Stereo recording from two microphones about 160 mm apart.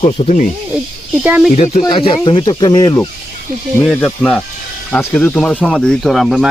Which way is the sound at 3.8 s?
5° left (ahead or behind).